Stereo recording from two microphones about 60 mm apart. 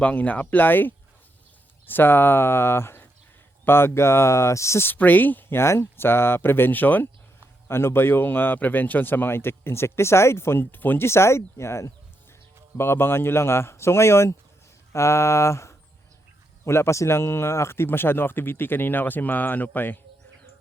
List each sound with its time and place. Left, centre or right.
0.0 s speech: left
4.9 s speech: left
7.7 s speech: left
11.0 s speech: left